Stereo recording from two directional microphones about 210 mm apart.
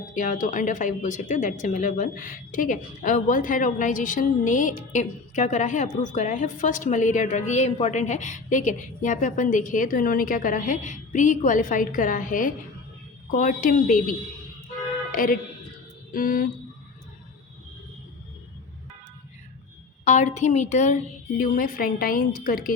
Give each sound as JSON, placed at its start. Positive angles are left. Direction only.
{"t": 0.1, "sound": "a woman's voice", "side_deg": 40}
{"t": 20.1, "sound": "a woman's voice", "side_deg": 35}